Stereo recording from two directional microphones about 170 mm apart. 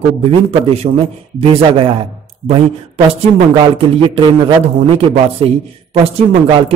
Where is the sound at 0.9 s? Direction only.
45° right (ahead or behind).